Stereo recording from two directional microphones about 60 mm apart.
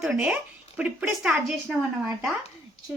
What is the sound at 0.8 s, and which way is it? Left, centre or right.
Speech, centre.